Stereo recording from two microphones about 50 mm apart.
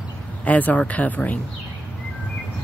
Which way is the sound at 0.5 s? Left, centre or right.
Left.